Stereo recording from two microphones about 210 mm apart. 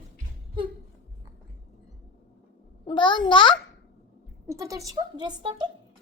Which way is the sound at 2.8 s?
25° left (ahead or behind).